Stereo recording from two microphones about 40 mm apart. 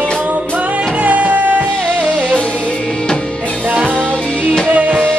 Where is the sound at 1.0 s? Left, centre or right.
Right.